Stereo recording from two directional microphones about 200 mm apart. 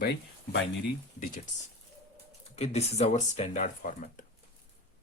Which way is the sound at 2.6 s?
30° left (ahead or behind).